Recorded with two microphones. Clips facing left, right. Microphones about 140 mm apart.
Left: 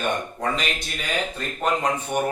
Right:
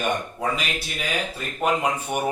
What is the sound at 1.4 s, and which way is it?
Speech, 10° right (ahead or behind).